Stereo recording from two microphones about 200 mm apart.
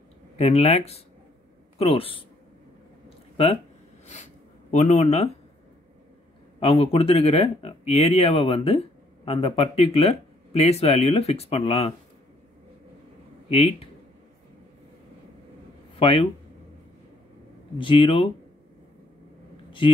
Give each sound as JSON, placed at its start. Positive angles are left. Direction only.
{"t": 0.4, "sound": "speech", "side_deg": 30}
{"t": 4.1, "sound": "speech", "side_deg": 35}
{"t": 6.6, "sound": "speech", "side_deg": 30}
{"t": 13.5, "sound": "speech", "side_deg": 30}
{"t": 16.0, "sound": "speech", "side_deg": 25}
{"t": 17.7, "sound": "speech", "side_deg": 25}